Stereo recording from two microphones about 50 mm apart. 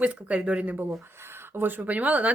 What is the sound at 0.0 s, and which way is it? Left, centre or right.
Speech, right.